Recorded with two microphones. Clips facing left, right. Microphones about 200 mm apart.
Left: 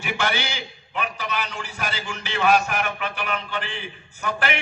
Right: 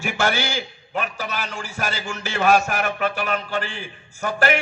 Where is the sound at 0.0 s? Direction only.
45° right (ahead or behind).